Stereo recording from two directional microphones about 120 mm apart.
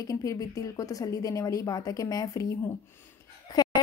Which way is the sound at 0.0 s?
30° left (ahead or behind).